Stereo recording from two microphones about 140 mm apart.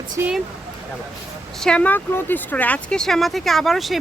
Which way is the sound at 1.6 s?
10° left (ahead or behind).